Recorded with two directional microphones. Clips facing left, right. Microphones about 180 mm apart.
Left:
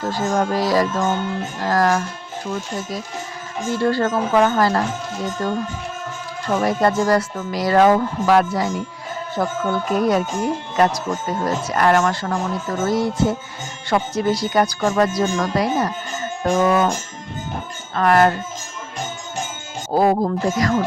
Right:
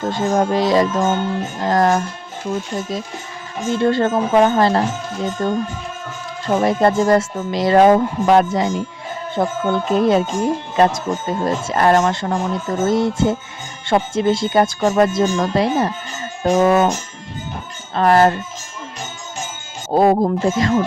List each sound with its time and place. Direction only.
0.0 s speech: 25° right (ahead or behind)
3.7 s speech: 20° right (ahead or behind)
17.9 s speech: 30° right (ahead or behind)
19.9 s speech: 25° right (ahead or behind)